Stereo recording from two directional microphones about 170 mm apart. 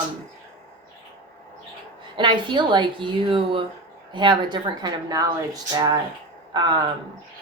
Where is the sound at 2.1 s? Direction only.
25° right (ahead or behind).